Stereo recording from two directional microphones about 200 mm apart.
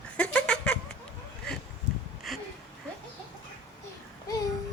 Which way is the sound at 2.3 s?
Centre (ahead or behind).